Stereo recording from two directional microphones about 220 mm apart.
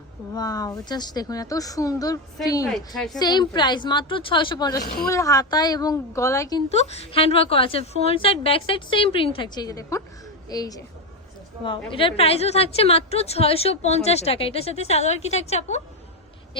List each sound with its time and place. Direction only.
0.3 s speech: 15° left (ahead or behind)
2.7 s a woman's voice: centre (ahead or behind)
3.2 s a woman's voice: 20° left (ahead or behind)
6.7 s a woman's voice: 30° left (ahead or behind)